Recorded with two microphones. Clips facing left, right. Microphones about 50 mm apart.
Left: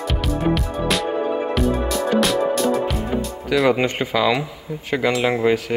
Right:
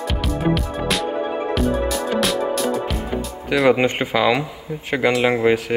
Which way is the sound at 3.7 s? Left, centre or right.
Right.